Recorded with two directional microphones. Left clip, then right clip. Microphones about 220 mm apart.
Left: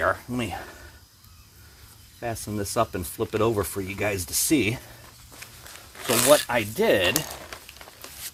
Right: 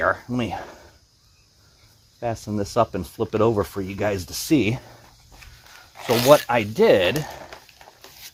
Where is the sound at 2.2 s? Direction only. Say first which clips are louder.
Right 4 dB; 30° right (ahead or behind).